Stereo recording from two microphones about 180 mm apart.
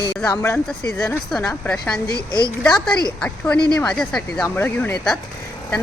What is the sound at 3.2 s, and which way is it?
Speech, 5° left (ahead or behind).